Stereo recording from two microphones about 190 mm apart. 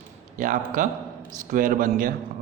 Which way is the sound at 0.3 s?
40° right (ahead or behind).